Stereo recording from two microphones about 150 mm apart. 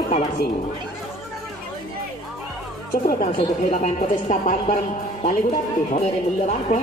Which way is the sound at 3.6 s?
55° left (ahead or behind).